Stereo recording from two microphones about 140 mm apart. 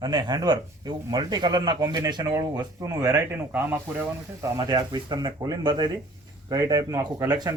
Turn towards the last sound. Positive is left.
turn(degrees=-25)  # may be behind; listen again after turning